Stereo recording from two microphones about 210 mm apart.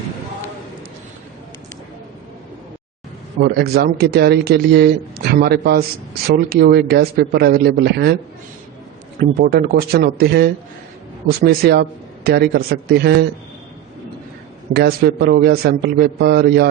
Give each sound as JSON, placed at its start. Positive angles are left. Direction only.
{"t": 3.4, "sound": "speech", "side_deg": -50}
{"t": 9.4, "sound": "speech", "side_deg": -45}
{"t": 14.7, "sound": "speech", "side_deg": -50}